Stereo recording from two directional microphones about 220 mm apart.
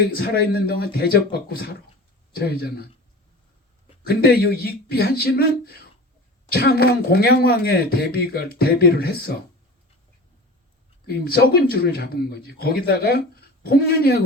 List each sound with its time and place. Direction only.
0.0 s speech: 45° left (ahead or behind)
4.0 s speech: 45° left (ahead or behind)
11.0 s speech: 45° left (ahead or behind)